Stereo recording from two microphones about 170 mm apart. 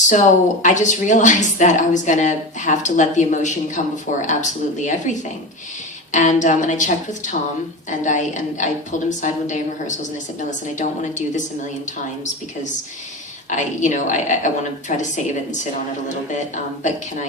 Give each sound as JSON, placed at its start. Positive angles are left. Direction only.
{"t": 0.1, "sound": "a woman's voice", "side_deg": 45}
{"t": 13.8, "sound": "a woman's voice", "side_deg": 45}